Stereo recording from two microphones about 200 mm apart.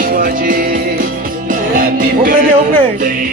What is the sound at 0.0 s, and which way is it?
Music, 45° right (ahead or behind).